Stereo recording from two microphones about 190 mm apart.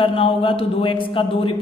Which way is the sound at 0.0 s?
30° left (ahead or behind).